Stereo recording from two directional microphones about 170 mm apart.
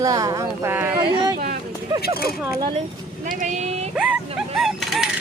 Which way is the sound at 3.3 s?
45° right (ahead or behind).